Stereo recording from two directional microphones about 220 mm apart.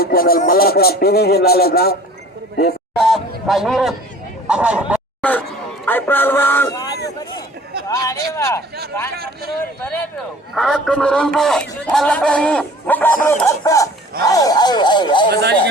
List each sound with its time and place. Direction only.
0.0 s speech: 40° left (ahead or behind)
2.9 s a man's voice: centre (ahead or behind)
5.8 s speech: 10° left (ahead or behind)
9.1 s speech: 45° right (ahead or behind)
10.5 s a man's voice: centre (ahead or behind); by 15.3 s 20° left (ahead or behind)
15.3 s speech: 50° right (ahead or behind)